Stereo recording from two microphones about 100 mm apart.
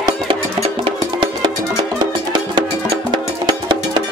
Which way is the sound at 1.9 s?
50° right (ahead or behind).